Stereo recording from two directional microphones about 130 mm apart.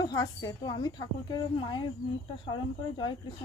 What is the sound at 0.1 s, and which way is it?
Speech, 25° left (ahead or behind).